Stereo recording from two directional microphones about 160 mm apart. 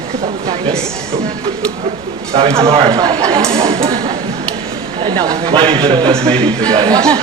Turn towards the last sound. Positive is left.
turn(degrees=-25)  # may be behind; listen again after turning